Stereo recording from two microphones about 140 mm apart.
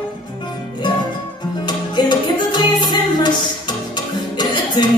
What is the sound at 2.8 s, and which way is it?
Music, 35° left (ahead or behind).